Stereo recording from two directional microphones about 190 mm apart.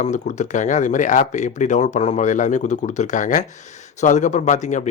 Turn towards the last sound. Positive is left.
turn(degrees=40)  # may be behind; listen again after turning